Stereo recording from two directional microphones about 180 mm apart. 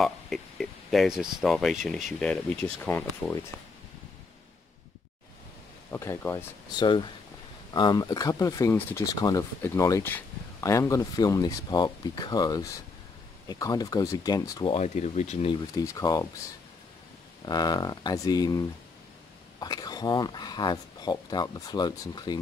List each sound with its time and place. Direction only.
0.0 s speech: centre (ahead or behind)
5.9 s speech: 15° left (ahead or behind)
6.8 s speech: 25° left (ahead or behind)
14.7 s speech: 40° left (ahead or behind)
15.8 s speech: 20° left (ahead or behind)
17.5 s speech: 25° left (ahead or behind)
19.6 s speech: 20° left (ahead or behind)